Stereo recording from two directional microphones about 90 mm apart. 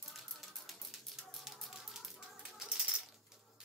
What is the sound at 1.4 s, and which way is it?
Typewriter, 5° right (ahead or behind).